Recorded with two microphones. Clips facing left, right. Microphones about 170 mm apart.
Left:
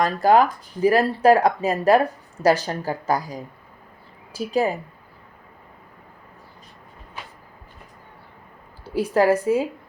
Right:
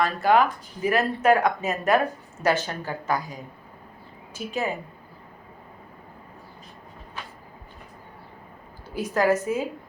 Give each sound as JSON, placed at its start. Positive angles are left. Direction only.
{"t": 0.0, "sound": "speech", "side_deg": 35}
{"t": 4.4, "sound": "speech", "side_deg": 35}
{"t": 9.0, "sound": "speech", "side_deg": 30}